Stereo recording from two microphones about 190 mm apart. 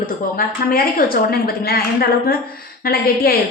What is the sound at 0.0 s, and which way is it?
A woman's voice, 50° left (ahead or behind).